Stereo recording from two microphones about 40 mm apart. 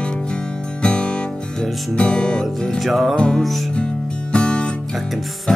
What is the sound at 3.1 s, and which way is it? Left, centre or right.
Music, left.